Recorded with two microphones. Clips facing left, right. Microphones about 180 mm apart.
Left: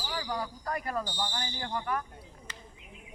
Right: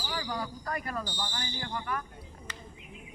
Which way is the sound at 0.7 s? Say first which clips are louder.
Left 4 dB; 30° left (ahead or behind).